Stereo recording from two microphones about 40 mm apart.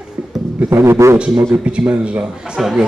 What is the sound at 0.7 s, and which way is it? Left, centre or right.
Speech, right.